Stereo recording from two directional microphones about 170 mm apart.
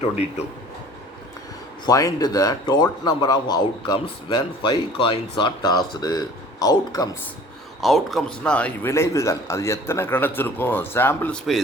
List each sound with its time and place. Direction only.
1.8 s a man's voice: 20° left (ahead or behind)
7.8 s speech: centre (ahead or behind)